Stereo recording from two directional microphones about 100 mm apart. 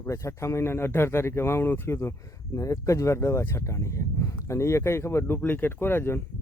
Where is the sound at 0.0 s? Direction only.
30° left (ahead or behind).